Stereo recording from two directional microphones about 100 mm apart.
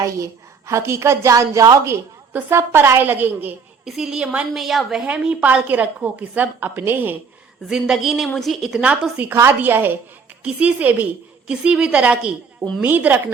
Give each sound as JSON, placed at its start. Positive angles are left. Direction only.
{"t": 0.0, "sound": "a woman's voice", "side_deg": -30}
{"t": 3.8, "sound": "a woman's voice", "side_deg": -5}
{"t": 7.7, "sound": "a woman's voice", "side_deg": -5}
{"t": 9.3, "sound": "a woman's voice", "side_deg": -30}